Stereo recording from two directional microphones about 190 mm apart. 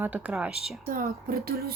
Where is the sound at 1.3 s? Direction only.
55° right (ahead or behind).